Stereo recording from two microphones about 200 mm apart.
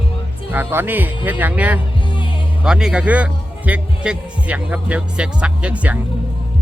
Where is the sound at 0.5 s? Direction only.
10° right (ahead or behind).